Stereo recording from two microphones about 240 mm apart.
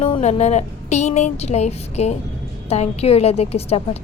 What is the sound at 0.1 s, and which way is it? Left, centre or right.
Speech, left.